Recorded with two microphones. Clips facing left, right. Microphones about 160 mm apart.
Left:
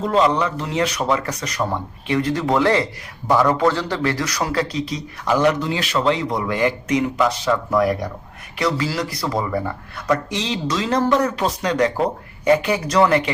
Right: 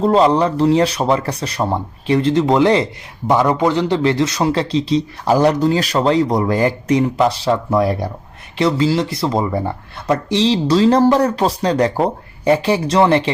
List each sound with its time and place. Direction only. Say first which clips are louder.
0.0 s speech: right 5 dB; 30° right (ahead or behind)